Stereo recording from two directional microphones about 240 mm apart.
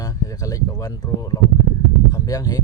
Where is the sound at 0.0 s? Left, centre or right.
Centre.